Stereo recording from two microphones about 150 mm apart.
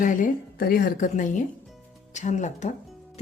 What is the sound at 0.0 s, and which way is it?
A woman's voice, 60° left (ahead or behind).